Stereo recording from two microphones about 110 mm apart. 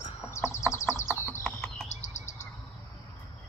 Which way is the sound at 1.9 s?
90° left.